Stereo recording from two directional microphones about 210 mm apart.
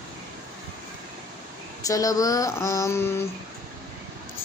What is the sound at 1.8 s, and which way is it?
A woman's voice, 15° left (ahead or behind).